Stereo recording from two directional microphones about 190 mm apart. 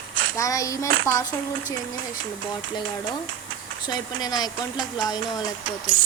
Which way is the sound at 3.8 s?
20° left (ahead or behind).